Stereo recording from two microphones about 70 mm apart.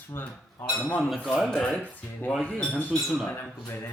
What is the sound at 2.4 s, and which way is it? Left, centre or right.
Speech, left.